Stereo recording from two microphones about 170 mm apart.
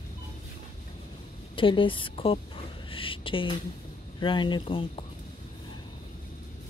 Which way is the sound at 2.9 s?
30° left (ahead or behind).